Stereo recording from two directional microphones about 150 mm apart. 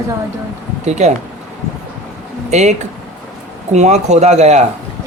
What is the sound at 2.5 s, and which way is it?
Speech, 50° right (ahead or behind).